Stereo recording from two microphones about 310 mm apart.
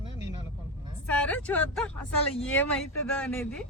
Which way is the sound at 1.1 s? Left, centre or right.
Centre.